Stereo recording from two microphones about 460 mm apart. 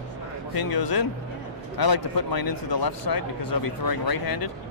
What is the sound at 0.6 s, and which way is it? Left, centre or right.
Speech, left.